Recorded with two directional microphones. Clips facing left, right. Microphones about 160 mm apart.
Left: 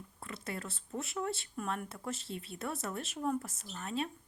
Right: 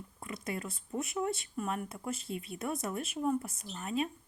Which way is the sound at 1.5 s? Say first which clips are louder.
Right 2 dB; 5° right (ahead or behind).